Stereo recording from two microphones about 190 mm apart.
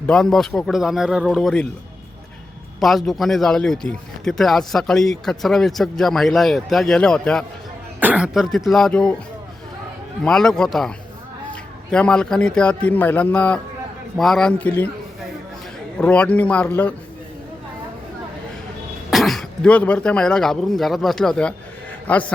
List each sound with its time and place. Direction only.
0.1 s speech: centre (ahead or behind)
2.8 s speech: centre (ahead or behind)
7.9 s speech: 10° right (ahead or behind)
10.2 s speech: 5° left (ahead or behind)
16.0 s speech: 5° left (ahead or behind)
19.1 s a man's voice: centre (ahead or behind)